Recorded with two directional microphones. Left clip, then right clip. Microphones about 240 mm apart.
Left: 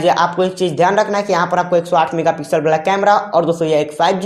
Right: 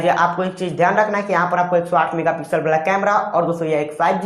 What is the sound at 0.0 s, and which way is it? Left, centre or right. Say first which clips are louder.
Speech: left 3 dB; left.